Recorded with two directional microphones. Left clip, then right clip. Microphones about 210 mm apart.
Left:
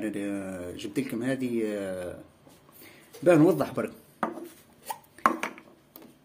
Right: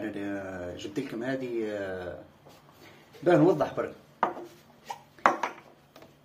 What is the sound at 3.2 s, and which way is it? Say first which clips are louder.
Speech: left 1 dB; 55° left (ahead or behind).